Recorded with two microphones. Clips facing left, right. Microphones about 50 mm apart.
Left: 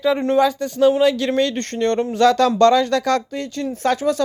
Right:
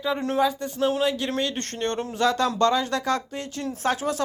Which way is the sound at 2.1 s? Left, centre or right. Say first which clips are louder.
Left 7 dB; left.